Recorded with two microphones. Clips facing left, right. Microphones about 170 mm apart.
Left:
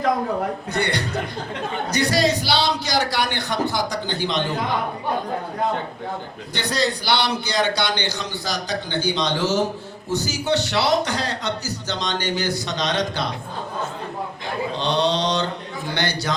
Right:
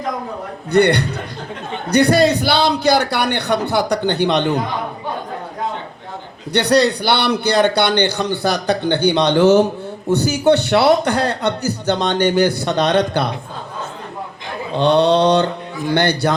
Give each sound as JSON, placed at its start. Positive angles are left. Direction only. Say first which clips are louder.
{"t": 0.7, "sound": "a man's voice", "louder": "right 15 dB", "side_deg": -60}
{"t": 6.5, "sound": "a man's voice", "louder": "right 9 dB", "side_deg": -65}
{"t": 14.8, "sound": "a man's voice", "louder": "right 10 dB", "side_deg": -60}